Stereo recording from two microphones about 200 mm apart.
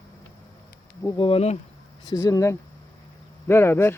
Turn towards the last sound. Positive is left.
turn(degrees=10)  # may be behind; listen again after turning